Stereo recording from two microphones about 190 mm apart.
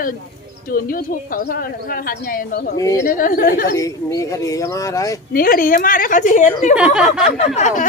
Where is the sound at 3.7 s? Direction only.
15° left (ahead or behind).